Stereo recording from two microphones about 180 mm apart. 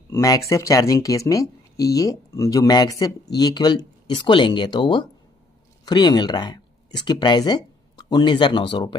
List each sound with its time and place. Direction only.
0.1 s speech: 20° left (ahead or behind)